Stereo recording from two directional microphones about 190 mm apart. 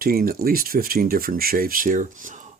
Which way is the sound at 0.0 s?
50° right (ahead or behind).